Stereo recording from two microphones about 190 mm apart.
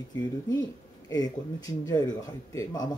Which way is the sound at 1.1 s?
20° left (ahead or behind).